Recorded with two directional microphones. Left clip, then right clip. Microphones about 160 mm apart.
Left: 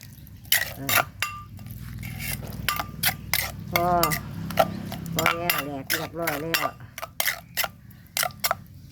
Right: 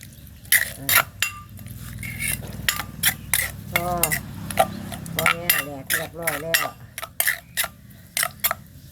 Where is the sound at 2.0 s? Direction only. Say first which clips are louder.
Right 6 dB; 20° left (ahead or behind).